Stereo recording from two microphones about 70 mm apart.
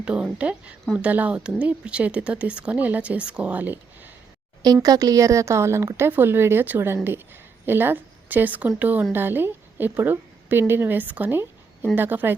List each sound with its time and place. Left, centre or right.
0.0 s speech: centre
4.6 s speech: right
6.1 s a woman's voice: right